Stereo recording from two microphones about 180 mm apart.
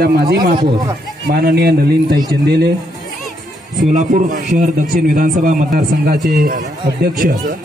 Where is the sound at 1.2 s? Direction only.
60° right (ahead or behind).